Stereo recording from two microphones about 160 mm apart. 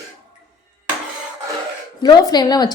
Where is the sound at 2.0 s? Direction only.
25° left (ahead or behind).